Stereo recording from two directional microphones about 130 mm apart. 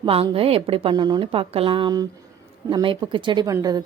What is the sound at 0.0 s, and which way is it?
A woman's voice, 45° right (ahead or behind).